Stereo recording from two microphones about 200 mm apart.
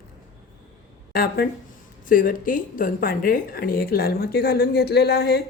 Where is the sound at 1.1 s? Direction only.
50° left (ahead or behind).